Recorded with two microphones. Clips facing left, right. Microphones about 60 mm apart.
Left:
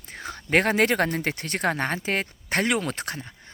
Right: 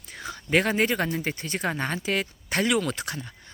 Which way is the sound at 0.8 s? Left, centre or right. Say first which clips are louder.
Left 3 dB; left.